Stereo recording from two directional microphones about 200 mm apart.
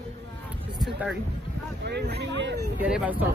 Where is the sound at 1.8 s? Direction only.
55° right (ahead or behind).